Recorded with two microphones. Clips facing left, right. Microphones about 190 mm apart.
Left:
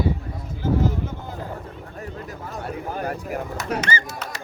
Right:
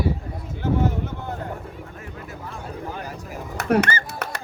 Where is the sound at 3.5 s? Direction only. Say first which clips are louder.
Right 10 dB; 60° right (ahead or behind).